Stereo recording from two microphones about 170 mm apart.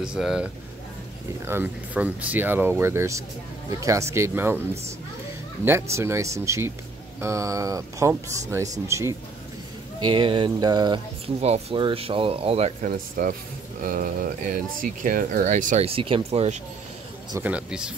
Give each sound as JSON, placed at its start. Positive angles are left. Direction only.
{"t": 0.0, "sound": "speech", "side_deg": -5}
{"t": 5.7, "sound": "speech", "side_deg": -15}
{"t": 10.0, "sound": "speech", "side_deg": -30}
{"t": 12.8, "sound": "speech", "side_deg": -50}
{"t": 17.4, "sound": "speech", "side_deg": -5}